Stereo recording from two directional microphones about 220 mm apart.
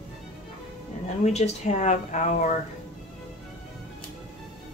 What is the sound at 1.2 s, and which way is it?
Speech, 30° left (ahead or behind).